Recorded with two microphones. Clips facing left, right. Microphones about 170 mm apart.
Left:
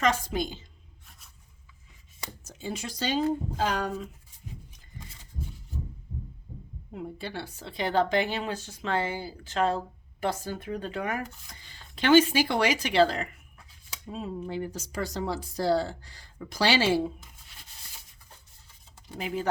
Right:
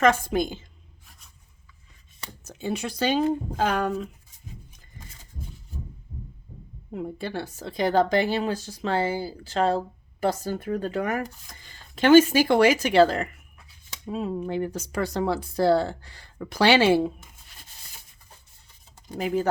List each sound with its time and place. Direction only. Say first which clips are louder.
0.0 s speech: right 6 dB; 50° right (ahead or behind)
2.4 s speech: right 6 dB; 60° right (ahead or behind)
4.9 s a sound: left 1 dB; 45° right (ahead or behind)
6.9 s speech: right 5 dB; 50° right (ahead or behind)
14.1 s speech: right 6 dB; 65° right (ahead or behind)
19.0 s speech: right 7 dB; 45° right (ahead or behind)